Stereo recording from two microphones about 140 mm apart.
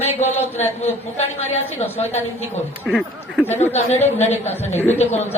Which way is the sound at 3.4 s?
15° left (ahead or behind).